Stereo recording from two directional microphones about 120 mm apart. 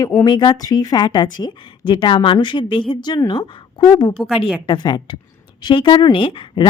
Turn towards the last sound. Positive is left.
turn(degrees=45)  # may be behind; listen again after turning